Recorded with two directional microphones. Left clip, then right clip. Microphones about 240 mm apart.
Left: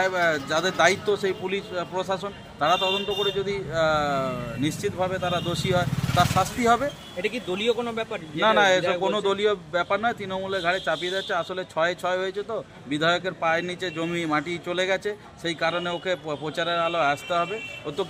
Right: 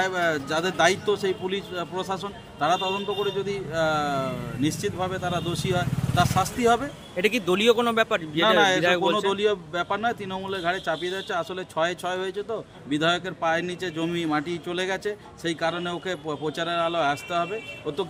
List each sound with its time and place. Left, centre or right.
0.0 s a man's voice: centre
7.2 s a man's voice: right
8.4 s a man's voice: centre